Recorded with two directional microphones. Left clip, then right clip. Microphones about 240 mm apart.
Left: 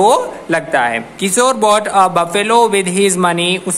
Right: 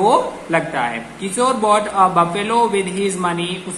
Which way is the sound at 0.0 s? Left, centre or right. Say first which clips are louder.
Left 3 dB; left.